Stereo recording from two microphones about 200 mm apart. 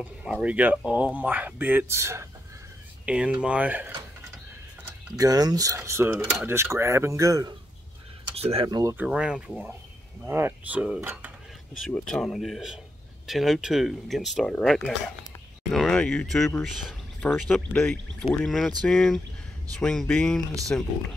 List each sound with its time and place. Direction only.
0.0 s cutlery: centre (ahead or behind)
3.1 s speech: 5° right (ahead or behind)
4.8 s cutlery: 15° right (ahead or behind)
8.4 s speech: 30° right (ahead or behind)
8.9 s speech: 5° right (ahead or behind)
10.2 s cutlery: 10° right (ahead or behind)
11.8 s speech: 5° left (ahead or behind)